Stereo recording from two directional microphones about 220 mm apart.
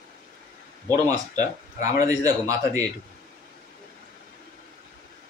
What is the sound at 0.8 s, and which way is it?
A man's voice, 15° right (ahead or behind).